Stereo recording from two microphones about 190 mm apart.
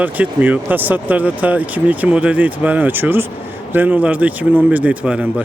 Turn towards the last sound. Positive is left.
turn(degrees=-5)  # may be behind; listen again after turning